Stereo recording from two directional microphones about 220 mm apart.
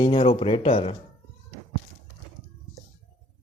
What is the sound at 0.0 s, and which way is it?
Mantra, 25° left (ahead or behind).